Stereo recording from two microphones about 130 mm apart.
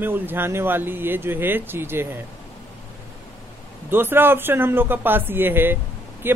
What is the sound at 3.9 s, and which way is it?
Speech, 15° right (ahead or behind).